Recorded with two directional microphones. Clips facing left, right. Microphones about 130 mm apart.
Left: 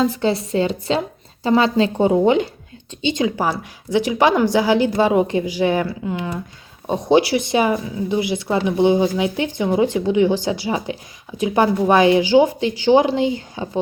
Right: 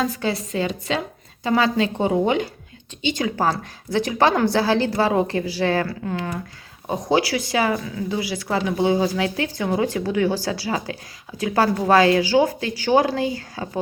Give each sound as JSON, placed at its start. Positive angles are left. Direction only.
{"t": 0.0, "sound": "speech", "side_deg": 25}
{"t": 3.3, "sound": "a woman's voice", "side_deg": 15}